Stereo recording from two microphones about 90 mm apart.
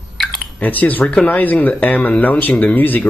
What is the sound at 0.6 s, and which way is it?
Speech, 20° left (ahead or behind).